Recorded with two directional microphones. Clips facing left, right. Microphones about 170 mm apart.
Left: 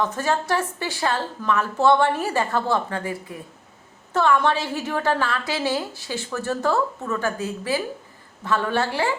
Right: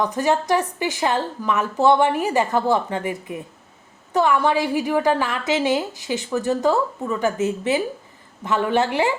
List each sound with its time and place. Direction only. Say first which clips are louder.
0.0 s a woman's voice: right 3 dB; 15° right (ahead or behind)